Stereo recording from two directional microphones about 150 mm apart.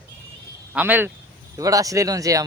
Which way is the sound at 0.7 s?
10° right (ahead or behind).